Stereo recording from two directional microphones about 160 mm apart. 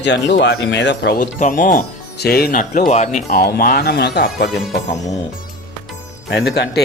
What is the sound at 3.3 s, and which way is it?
Speech, 75° left (ahead or behind).